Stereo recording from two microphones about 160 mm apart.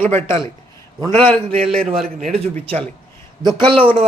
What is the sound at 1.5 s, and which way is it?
Speech, 35° right (ahead or behind).